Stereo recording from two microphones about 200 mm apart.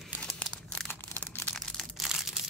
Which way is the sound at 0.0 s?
Centre (ahead or behind).